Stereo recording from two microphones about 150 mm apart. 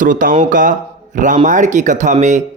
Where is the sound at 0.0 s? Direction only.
65° right (ahead or behind).